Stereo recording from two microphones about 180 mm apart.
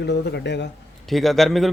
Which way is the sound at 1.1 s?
Centre (ahead or behind).